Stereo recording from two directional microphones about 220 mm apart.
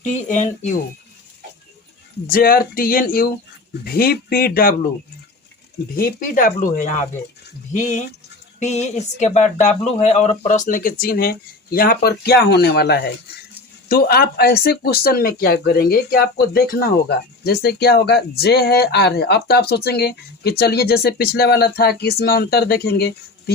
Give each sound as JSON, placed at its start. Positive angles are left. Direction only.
{"t": 0.0, "sound": "speech", "side_deg": 35}
{"t": 2.3, "sound": "speech", "side_deg": 40}
{"t": 5.9, "sound": "speech", "side_deg": 40}